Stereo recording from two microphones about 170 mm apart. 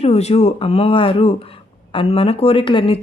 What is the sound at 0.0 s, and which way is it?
Speech, 40° left (ahead or behind).